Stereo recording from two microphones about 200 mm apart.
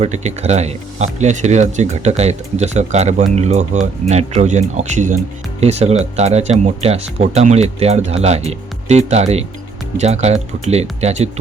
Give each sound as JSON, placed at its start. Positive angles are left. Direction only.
{"t": 0.0, "sound": "speech", "side_deg": -35}